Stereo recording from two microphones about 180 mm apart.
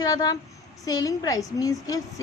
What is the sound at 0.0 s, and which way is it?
A woman's voice, 20° left (ahead or behind).